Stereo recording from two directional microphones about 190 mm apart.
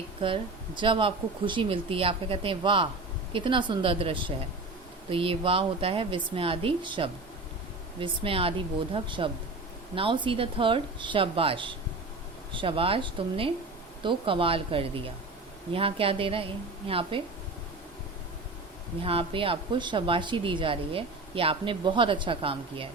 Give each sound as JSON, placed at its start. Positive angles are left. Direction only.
{"t": 0.2, "sound": "a woman's voice", "side_deg": -25}
{"t": 19.0, "sound": "a woman's voice", "side_deg": -30}